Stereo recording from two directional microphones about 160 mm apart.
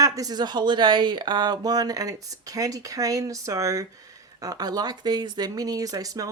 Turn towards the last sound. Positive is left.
turn(degrees=-20)  # may be behind; listen again after turning